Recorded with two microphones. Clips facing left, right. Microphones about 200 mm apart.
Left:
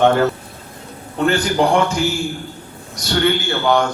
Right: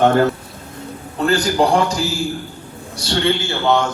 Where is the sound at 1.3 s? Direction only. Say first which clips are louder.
Right 1 dB; 35° right (ahead or behind).